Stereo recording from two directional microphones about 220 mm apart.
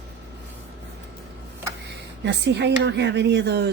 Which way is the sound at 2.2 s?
50° right (ahead or behind).